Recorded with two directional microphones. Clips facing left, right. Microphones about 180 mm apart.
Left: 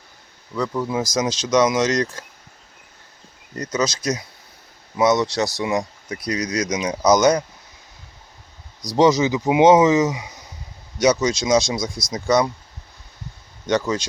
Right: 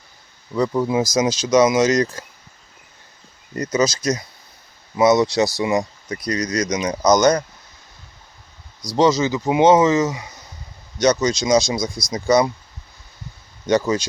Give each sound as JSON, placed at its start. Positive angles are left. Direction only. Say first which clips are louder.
{"t": 0.5, "sound": "speech", "louder": "right 4 dB", "side_deg": -15}
{"t": 3.5, "sound": "speech", "louder": "right 4 dB", "side_deg": -5}
{"t": 8.8, "sound": "speech", "louder": "left 1 dB", "side_deg": 15}
{"t": 13.7, "sound": "speech", "louder": "right 3 dB", "side_deg": -5}